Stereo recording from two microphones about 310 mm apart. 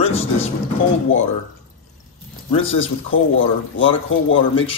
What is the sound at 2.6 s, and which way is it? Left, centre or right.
Speech, left.